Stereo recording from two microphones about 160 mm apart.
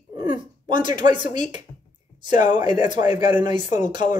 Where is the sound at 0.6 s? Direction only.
30° right (ahead or behind).